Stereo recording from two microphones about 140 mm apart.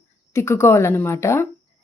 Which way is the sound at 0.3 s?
20° left (ahead or behind).